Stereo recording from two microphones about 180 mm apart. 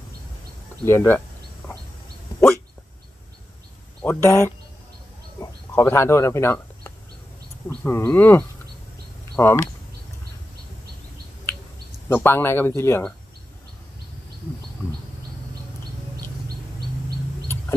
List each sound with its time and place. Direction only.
0.8 s speech: 10° left (ahead or behind)
4.0 s speech: 15° left (ahead or behind)
12.1 s speech: 10° left (ahead or behind)